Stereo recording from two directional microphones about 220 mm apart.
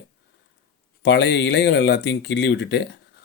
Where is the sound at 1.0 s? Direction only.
50° left (ahead or behind).